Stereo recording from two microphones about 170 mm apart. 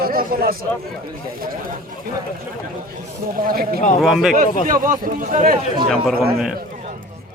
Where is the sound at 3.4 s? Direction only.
60° right (ahead or behind).